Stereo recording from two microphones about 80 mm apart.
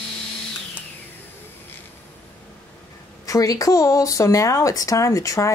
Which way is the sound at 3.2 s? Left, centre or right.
Left.